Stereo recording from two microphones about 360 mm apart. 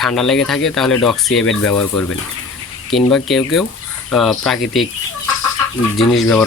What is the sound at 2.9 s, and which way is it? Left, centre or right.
Speech, centre.